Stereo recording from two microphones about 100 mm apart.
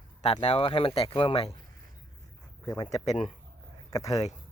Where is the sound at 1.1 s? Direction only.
60° left (ahead or behind).